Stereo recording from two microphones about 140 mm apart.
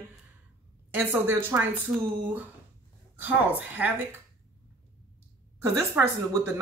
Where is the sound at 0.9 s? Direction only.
15° right (ahead or behind).